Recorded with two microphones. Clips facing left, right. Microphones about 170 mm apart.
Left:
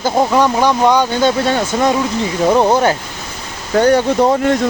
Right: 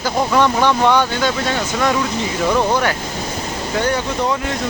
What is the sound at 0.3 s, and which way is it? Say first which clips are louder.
Speech: right 1 dB; 10° left (ahead or behind).